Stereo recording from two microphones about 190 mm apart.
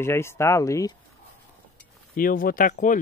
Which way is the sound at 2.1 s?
45° left (ahead or behind).